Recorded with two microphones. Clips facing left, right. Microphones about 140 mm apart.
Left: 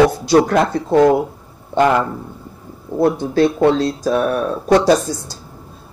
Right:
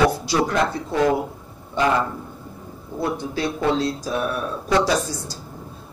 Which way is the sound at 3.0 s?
55° left (ahead or behind).